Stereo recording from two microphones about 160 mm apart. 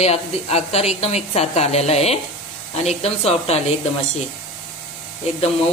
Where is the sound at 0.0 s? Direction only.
40° left (ahead or behind).